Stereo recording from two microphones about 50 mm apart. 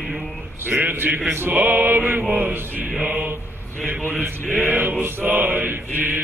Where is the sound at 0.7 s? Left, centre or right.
Right.